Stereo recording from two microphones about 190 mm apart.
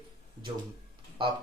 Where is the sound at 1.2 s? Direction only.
25° right (ahead or behind).